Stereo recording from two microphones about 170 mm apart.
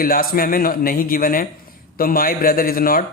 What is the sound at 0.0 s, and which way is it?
A man's voice, 60° left (ahead or behind).